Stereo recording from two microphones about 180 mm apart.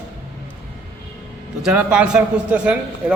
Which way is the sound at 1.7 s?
5° right (ahead or behind).